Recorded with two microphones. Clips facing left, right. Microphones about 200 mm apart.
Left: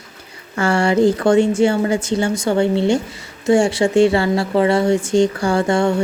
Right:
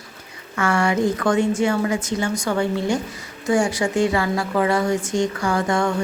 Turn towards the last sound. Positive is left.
turn(degrees=25)  # may be behind; listen again after turning